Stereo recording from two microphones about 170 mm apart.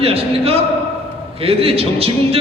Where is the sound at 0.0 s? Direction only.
35° right (ahead or behind).